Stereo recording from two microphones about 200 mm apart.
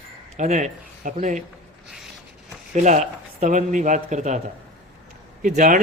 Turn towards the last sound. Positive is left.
turn(degrees=-40)  # may be behind; listen again after turning